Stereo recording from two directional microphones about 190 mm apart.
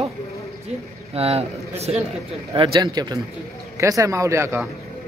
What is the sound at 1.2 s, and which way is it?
Speech, 30° right (ahead or behind).